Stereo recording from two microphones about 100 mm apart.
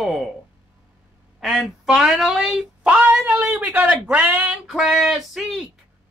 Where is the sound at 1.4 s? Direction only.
Centre (ahead or behind).